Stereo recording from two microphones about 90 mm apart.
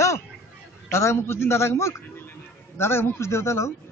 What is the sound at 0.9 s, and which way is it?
A man's voice, 30° left (ahead or behind).